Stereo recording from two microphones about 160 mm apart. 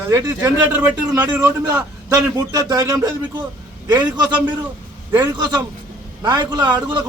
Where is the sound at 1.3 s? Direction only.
10° right (ahead or behind).